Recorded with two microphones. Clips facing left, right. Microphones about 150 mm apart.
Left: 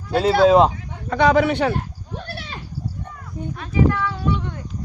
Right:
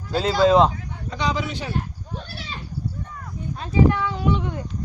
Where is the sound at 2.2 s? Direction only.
60° left (ahead or behind).